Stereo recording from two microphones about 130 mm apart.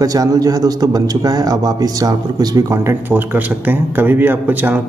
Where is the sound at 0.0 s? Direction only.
30° right (ahead or behind).